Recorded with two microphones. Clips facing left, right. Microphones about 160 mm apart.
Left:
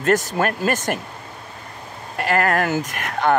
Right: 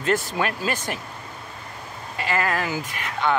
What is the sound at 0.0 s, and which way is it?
Speech, 45° left (ahead or behind).